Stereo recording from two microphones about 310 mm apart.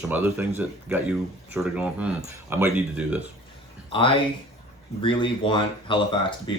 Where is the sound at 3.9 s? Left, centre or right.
Centre.